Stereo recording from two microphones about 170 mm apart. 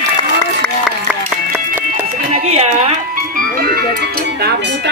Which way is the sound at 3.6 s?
60° right (ahead or behind).